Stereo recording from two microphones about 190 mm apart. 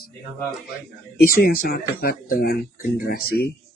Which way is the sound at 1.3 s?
50° left (ahead or behind).